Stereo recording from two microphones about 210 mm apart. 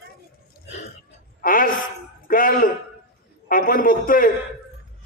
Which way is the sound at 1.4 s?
40° left (ahead or behind).